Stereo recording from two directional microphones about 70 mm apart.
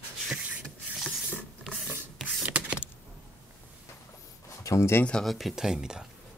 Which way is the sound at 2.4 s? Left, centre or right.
Centre.